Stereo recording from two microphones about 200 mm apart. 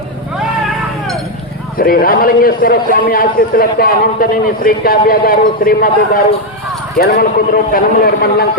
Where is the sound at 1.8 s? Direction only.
45° left (ahead or behind).